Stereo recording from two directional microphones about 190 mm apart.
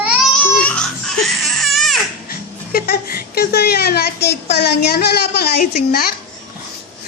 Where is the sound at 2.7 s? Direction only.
50° left (ahead or behind).